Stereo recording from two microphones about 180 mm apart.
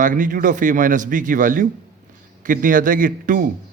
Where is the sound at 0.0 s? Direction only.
45° right (ahead or behind).